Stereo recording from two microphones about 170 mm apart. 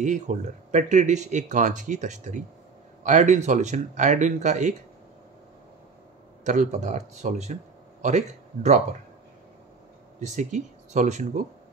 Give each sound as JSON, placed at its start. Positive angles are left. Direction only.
{"t": 0.0, "sound": "speech", "side_deg": -45}
{"t": 6.4, "sound": "speech", "side_deg": -45}
{"t": 10.2, "sound": "speech", "side_deg": -45}